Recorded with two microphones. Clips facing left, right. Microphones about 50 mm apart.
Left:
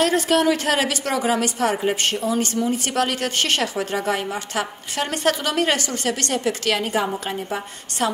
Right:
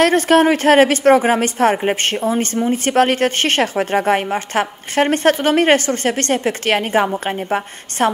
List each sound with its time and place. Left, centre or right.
0.0 s a woman's voice: right